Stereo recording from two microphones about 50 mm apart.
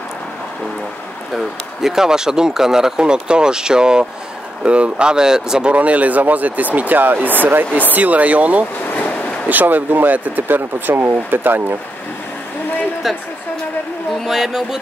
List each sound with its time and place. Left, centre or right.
1.3 s speech: centre
5.7 s speech: right
8.8 s a sound: left
9.5 s speech: right
13.0 s a woman's voice: centre
14.2 s speech: centre